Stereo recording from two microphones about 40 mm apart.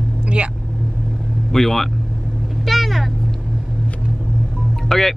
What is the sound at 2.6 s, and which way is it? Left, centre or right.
Vehicle, centre.